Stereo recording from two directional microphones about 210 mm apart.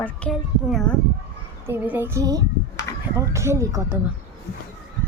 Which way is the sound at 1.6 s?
10° right (ahead or behind).